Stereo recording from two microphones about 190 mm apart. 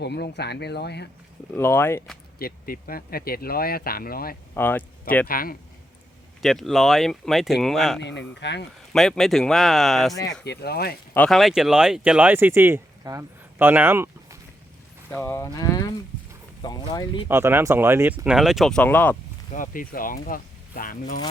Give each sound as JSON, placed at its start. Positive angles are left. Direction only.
{"t": 0.0, "sound": "speech", "side_deg": 60}
{"t": 1.5, "sound": "speech", "side_deg": 10}
{"t": 2.4, "sound": "speech", "side_deg": 50}
{"t": 4.5, "sound": "speech", "side_deg": 10}
{"t": 5.3, "sound": "speech", "side_deg": 50}
{"t": 6.4, "sound": "speech", "side_deg": 0}
{"t": 8.4, "sound": "speech", "side_deg": 65}
{"t": 8.9, "sound": "speech", "side_deg": 0}
{"t": 10.4, "sound": "speech", "side_deg": 60}
{"t": 11.1, "sound": "speech", "side_deg": 5}
{"t": 15.1, "sound": "speech", "side_deg": 10}
{"t": 17.2, "sound": "speech", "side_deg": -10}
{"t": 19.5, "sound": "speech", "side_deg": 45}